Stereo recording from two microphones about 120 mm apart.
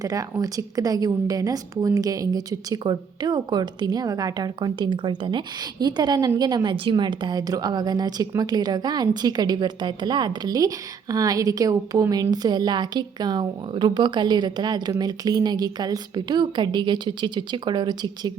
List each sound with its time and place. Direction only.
0.0 s a woman's voice: 30° right (ahead or behind)